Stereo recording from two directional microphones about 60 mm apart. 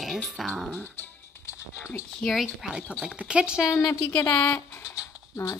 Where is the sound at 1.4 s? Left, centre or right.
Left.